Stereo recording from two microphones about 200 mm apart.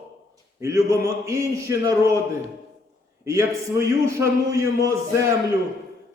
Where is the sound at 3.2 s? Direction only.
15° right (ahead or behind).